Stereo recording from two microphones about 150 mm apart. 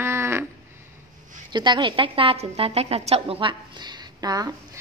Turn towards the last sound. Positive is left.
turn(degrees=-25)  # may be behind; listen again after turning